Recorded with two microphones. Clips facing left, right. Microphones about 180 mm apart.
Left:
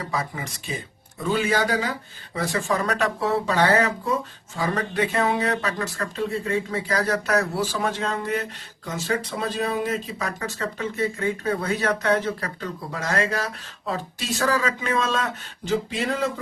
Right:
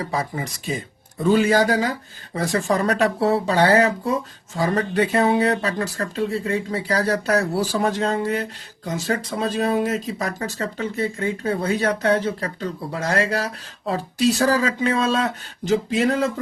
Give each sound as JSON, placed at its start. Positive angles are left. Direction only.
{"t": 0.0, "sound": "speech", "side_deg": -35}